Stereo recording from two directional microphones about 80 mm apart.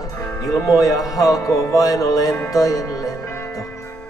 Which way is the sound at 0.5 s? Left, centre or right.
Left.